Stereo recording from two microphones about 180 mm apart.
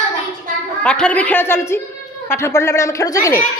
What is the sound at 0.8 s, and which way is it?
A woman's voice, 5° left (ahead or behind).